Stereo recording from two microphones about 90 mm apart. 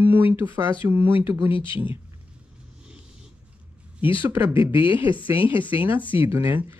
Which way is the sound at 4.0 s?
75° left (ahead or behind).